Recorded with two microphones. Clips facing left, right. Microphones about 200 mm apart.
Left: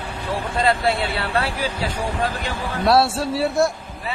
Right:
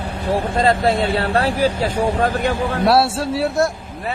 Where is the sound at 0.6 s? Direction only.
40° right (ahead or behind).